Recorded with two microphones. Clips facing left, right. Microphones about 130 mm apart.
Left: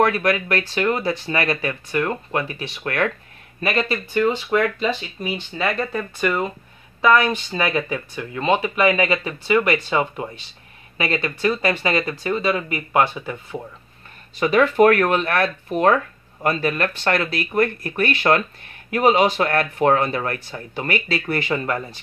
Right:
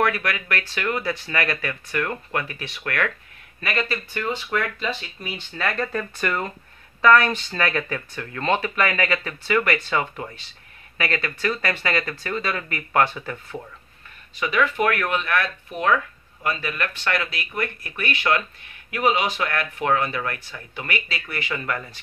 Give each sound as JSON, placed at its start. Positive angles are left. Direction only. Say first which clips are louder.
{"t": 0.0, "sound": "speech", "louder": "left 5 dB", "side_deg": 30}
{"t": 14.4, "sound": "speech", "louder": "left 7 dB", "side_deg": 40}